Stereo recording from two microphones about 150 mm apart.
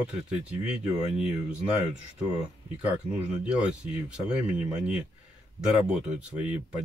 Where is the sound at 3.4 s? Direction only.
5° right (ahead or behind).